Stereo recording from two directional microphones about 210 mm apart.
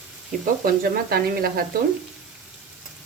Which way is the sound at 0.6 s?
45° right (ahead or behind).